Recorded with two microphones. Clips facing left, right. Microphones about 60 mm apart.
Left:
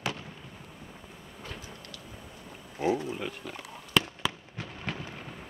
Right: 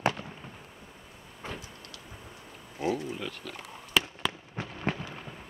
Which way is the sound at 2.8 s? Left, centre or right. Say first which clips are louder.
Left 2 dB; left.